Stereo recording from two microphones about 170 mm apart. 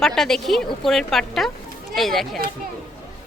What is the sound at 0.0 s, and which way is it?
Speech, centre (ahead or behind).